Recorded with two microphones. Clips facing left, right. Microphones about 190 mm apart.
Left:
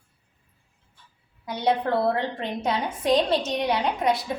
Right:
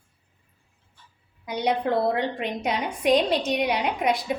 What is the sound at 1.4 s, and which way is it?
A woman's voice, 15° right (ahead or behind).